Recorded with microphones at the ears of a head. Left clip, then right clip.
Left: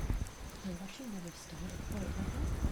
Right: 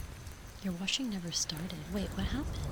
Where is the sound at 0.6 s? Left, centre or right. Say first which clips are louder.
Right 13 dB; right.